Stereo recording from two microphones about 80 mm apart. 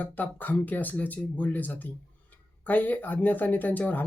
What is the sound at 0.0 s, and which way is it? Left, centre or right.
Speech, left.